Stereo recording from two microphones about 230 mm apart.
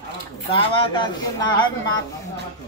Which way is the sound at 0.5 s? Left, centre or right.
Centre.